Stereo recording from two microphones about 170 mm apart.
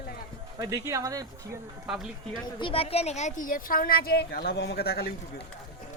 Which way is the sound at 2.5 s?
30° left (ahead or behind).